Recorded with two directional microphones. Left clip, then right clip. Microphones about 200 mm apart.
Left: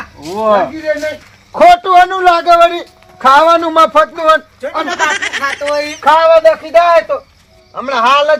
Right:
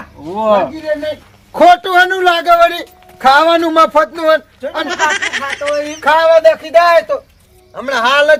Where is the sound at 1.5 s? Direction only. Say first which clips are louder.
Left 2 dB; 15° right (ahead or behind).